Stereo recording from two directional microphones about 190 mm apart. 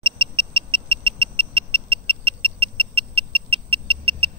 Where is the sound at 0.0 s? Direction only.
25° right (ahead or behind).